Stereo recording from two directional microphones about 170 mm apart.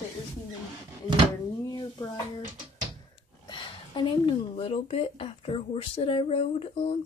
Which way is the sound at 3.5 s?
30° left (ahead or behind).